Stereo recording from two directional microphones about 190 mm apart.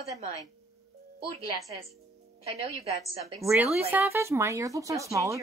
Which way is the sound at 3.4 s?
15° right (ahead or behind).